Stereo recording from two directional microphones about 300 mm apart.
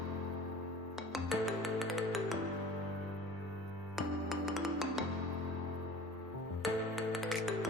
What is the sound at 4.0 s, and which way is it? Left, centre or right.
Music, centre.